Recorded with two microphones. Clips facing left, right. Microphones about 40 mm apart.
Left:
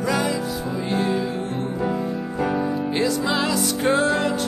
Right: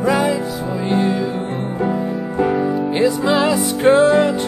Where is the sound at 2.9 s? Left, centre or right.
Centre.